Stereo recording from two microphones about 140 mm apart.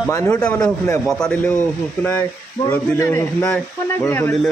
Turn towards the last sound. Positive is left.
turn(degrees=15)  # may be behind; listen again after turning